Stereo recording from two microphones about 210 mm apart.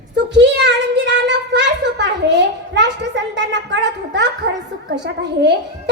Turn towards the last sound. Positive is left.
turn(degrees=-55)  # may be behind; listen again after turning